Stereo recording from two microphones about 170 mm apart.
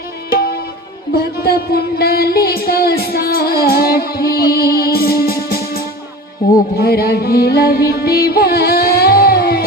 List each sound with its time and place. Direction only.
0.3 s music: 65° left (ahead or behind)